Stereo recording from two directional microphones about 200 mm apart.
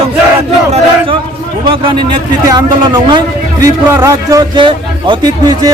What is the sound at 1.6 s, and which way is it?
A man's voice, 25° right (ahead or behind).